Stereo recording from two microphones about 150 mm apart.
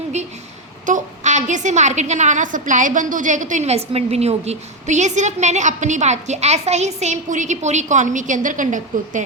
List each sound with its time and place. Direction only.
0.9 s a woman's voice: 55° right (ahead or behind)